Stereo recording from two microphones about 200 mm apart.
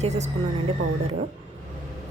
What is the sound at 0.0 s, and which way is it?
Speech, 35° right (ahead or behind).